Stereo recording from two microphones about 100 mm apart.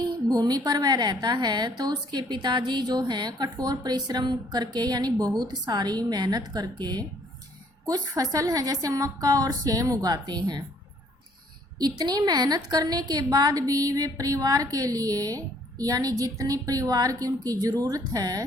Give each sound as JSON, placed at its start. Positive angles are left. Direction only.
{"t": 0.0, "sound": "a woman's voice", "side_deg": -45}
{"t": 11.8, "sound": "a woman's voice", "side_deg": -45}